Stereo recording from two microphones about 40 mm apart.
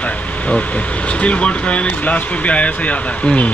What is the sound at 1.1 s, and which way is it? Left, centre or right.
Speech, left.